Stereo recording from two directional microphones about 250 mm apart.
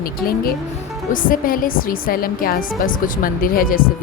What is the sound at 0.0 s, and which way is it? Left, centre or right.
A woman's voice, left.